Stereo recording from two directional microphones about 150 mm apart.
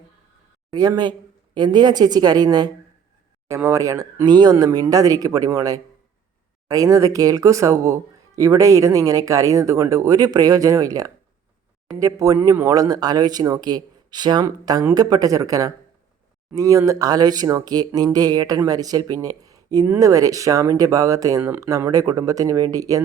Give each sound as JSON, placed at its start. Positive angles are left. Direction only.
{"t": 0.7, "sound": "speech", "side_deg": -25}